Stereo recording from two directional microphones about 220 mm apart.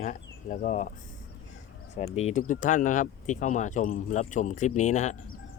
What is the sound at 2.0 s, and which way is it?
Speech, 30° left (ahead or behind).